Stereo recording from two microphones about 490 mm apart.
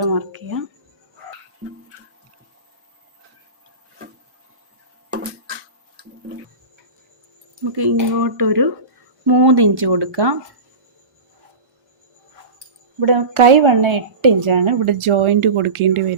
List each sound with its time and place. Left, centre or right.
0.0 s speech: right
7.6 s speech: right
13.0 s a woman's voice: right